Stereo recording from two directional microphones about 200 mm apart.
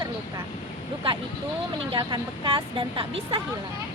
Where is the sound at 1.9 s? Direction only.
20° right (ahead or behind).